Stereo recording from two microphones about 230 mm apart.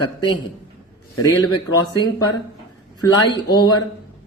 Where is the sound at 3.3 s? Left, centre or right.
Centre.